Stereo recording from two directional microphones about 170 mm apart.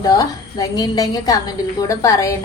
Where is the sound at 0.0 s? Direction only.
20° left (ahead or behind).